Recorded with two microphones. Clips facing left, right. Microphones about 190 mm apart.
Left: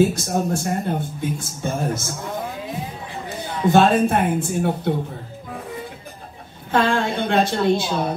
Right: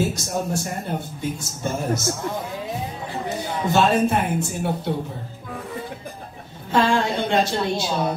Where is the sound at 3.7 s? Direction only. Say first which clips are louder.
Left 3 dB; 55° left (ahead or behind).